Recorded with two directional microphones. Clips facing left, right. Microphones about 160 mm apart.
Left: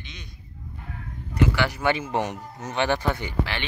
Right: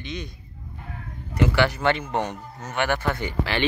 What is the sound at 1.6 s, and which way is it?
Speech, 15° left (ahead or behind).